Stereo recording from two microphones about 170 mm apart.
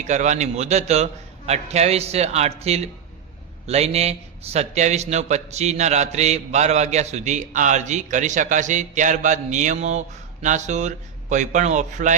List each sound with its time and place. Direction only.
0.0 s a man's voice: 45° right (ahead or behind)